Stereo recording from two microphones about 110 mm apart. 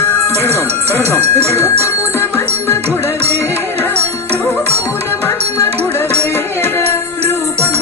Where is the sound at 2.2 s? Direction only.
20° left (ahead or behind).